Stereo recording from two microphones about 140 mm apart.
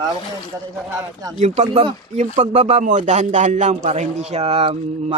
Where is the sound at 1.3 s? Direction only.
55° right (ahead or behind).